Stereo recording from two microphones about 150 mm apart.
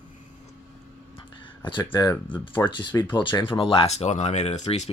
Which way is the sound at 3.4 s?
35° left (ahead or behind).